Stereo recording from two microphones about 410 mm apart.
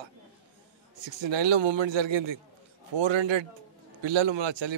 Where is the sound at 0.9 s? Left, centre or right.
Right.